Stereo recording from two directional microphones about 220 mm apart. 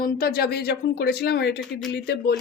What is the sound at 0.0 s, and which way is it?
Speech, 40° left (ahead or behind).